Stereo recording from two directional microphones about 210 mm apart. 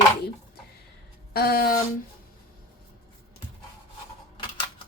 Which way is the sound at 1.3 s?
45° left (ahead or behind).